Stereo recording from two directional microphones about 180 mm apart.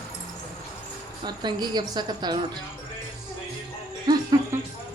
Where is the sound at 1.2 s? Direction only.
25° right (ahead or behind).